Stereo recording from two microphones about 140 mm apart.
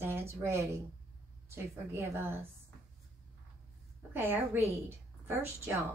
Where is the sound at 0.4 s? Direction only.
20° right (ahead or behind).